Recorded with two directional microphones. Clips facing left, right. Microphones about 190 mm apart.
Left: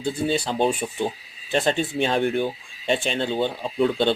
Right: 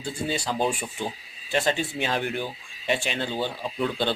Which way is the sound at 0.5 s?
25° left (ahead or behind).